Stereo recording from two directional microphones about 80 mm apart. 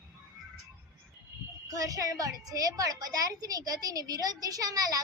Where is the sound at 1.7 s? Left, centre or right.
Right.